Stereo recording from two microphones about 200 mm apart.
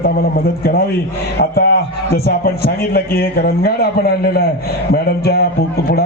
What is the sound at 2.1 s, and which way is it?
A man's voice, 50° left (ahead or behind).